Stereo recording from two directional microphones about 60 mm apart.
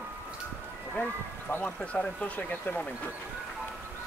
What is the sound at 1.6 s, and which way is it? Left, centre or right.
Speech, centre.